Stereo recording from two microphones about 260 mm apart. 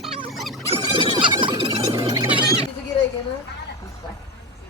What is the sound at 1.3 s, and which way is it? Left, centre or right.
Music, centre.